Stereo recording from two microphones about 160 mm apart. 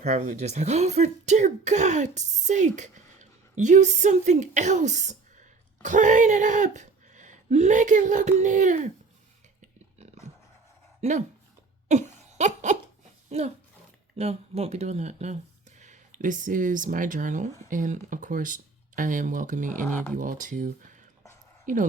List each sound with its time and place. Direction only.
0.0 s speech: 45° right (ahead or behind)
11.0 s speech: 45° right (ahead or behind)
11.9 s laughter: 50° right (ahead or behind)
13.3 s speech: 40° right (ahead or behind)